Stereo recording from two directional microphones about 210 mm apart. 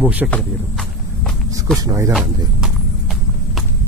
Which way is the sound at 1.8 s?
15° right (ahead or behind).